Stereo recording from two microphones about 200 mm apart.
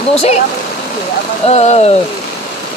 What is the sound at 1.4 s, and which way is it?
Speech, 35° left (ahead or behind).